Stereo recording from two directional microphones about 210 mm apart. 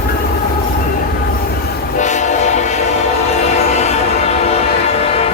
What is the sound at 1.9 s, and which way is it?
Train, 35° left (ahead or behind).